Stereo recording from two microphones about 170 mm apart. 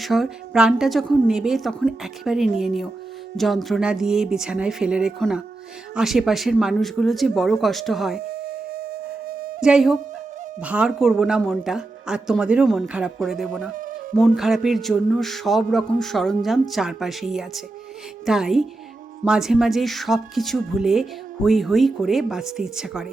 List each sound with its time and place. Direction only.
0.0 s speech: centre (ahead or behind)
8.2 s flute: 70° right (ahead or behind)
9.6 s speech: 5° right (ahead or behind)